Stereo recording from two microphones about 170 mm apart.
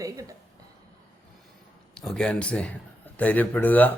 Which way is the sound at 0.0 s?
20° right (ahead or behind).